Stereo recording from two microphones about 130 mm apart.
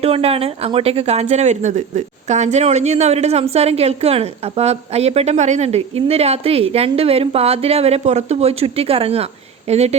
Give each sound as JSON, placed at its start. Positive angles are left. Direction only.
{"t": 0.0, "sound": "speech", "side_deg": -50}